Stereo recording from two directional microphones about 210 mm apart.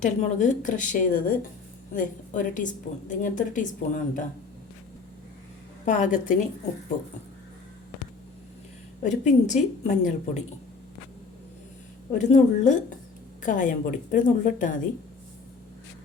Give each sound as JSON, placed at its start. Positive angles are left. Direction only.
{"t": 0.0, "sound": "a woman's voice", "side_deg": 35}
{"t": 5.8, "sound": "a woman's voice", "side_deg": 35}
{"t": 9.0, "sound": "a woman's voice", "side_deg": 35}
{"t": 12.1, "sound": "a woman's voice", "side_deg": 35}